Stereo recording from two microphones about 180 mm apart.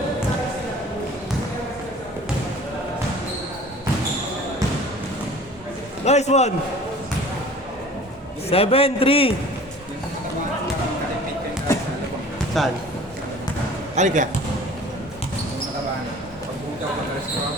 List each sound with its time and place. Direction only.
6.1 s a man's voice: 40° left (ahead or behind)
8.4 s a man's voice: 35° left (ahead or behind)
12.6 s speech: centre (ahead or behind)
13.9 s speech: 40° right (ahead or behind)